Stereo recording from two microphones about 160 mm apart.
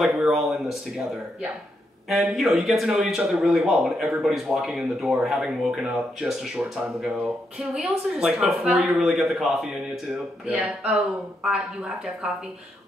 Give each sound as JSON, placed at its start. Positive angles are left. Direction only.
{"t": 0.0, "sound": "a man's voice", "side_deg": 0}
{"t": 2.0, "sound": "a man's voice", "side_deg": 0}